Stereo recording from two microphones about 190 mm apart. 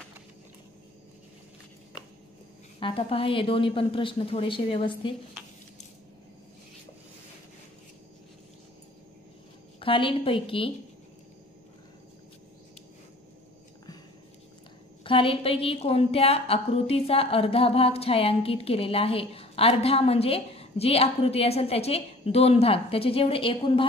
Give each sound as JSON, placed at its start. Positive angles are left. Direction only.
{"t": 2.8, "sound": "a woman's voice", "side_deg": 30}
{"t": 9.8, "sound": "a woman's voice", "side_deg": 25}
{"t": 15.0, "sound": "a woman's voice", "side_deg": 30}